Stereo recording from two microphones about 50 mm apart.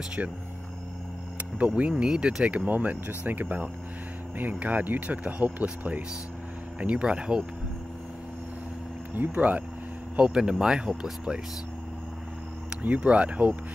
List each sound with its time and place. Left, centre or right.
1.8 s speech: centre
7.1 s speech: centre
9.3 s speech: right
10.1 s speech: centre
12.8 s speech: right